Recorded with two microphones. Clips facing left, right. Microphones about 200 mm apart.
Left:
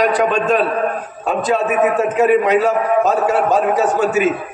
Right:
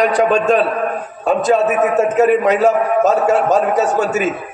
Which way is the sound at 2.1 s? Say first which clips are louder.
Even; 45° right (ahead or behind).